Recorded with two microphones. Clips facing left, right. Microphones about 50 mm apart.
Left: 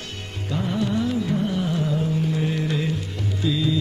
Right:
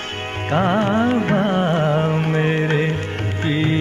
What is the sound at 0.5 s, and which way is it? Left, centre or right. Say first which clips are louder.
Music: right 7 dB; right.